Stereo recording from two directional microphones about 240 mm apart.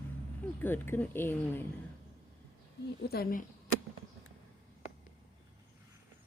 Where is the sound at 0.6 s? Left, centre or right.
Centre.